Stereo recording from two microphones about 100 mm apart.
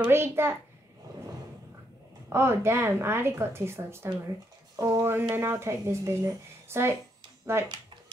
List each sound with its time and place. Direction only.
0.0 s speech: 25° right (ahead or behind)
2.2 s speech: 25° right (ahead or behind)
4.7 s a sound: 30° right (ahead or behind)
5.3 s speech: 25° right (ahead or behind)